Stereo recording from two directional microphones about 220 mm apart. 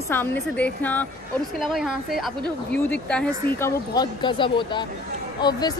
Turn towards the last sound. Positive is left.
turn(degrees=20)  # may be behind; listen again after turning